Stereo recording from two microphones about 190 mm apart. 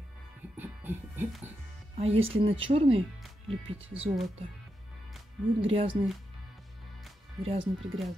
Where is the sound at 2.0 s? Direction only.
30° right (ahead or behind).